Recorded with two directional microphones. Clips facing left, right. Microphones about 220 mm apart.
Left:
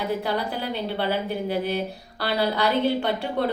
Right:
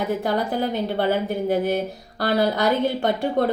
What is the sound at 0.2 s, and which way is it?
A woman's voice, 45° right (ahead or behind).